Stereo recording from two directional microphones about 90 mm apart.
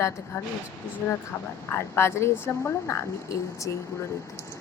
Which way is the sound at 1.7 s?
30° left (ahead or behind).